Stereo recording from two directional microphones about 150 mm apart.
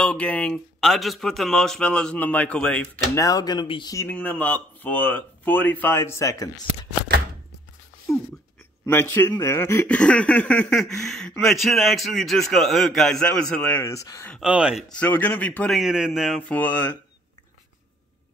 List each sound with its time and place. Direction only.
0.0 s speech: 5° left (ahead or behind)
3.2 s speech: 25° left (ahead or behind)
3.9 s speech: 15° left (ahead or behind)
8.1 s a sound: 20° left (ahead or behind)
8.8 s speech: 15° left (ahead or behind)
14.4 s speech: 5° right (ahead or behind)
14.9 s speech: 10° left (ahead or behind)
15.8 s speech: 5° right (ahead or behind); by 16.9 s 10° left (ahead or behind)